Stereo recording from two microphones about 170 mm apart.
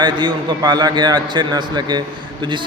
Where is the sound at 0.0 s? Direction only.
25° right (ahead or behind).